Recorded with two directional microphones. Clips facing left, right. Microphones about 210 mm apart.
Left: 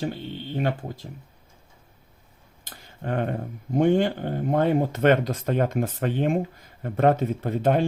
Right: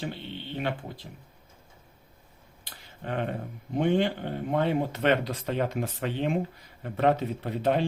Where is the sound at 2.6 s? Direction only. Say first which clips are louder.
Left 5 dB; 45° left (ahead or behind).